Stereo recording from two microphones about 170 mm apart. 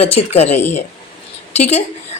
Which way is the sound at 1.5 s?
40° left (ahead or behind).